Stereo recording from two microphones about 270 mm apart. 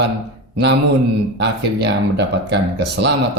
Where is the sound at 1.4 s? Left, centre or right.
Right.